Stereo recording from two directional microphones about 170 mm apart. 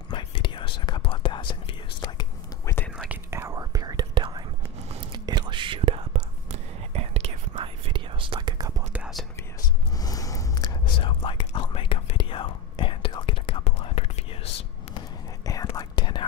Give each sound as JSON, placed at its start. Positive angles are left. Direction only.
{"t": 0.1, "sound": "whispering", "side_deg": 30}
{"t": 2.6, "sound": "whispering", "side_deg": 15}
{"t": 3.1, "sound": "whispering", "side_deg": -15}
{"t": 4.8, "sound": "whispering", "side_deg": -40}
{"t": 5.2, "sound": "whispering", "side_deg": -25}
{"t": 8.9, "sound": "whispering", "side_deg": -5}
{"t": 9.9, "sound": "whispering", "side_deg": 20}
{"t": 15.0, "sound": "whispering", "side_deg": 20}